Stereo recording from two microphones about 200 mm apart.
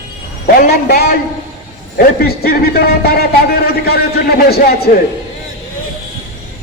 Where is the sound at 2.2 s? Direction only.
50° left (ahead or behind).